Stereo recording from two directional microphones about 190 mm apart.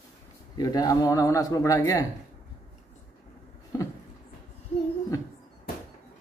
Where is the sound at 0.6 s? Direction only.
20° left (ahead or behind).